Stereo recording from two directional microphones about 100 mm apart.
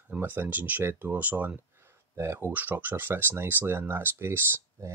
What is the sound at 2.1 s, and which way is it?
Speech, 25° right (ahead or behind).